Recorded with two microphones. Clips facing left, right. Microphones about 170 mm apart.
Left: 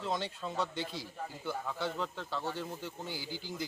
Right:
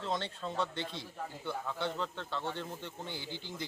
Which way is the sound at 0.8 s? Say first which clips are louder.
Left 1 dB; 25° right (ahead or behind).